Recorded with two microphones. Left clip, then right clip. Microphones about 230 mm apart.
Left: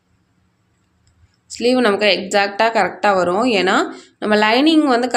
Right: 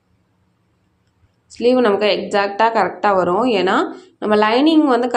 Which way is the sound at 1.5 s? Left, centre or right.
Centre.